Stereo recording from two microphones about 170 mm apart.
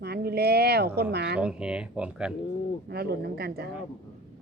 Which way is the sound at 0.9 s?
70° right (ahead or behind).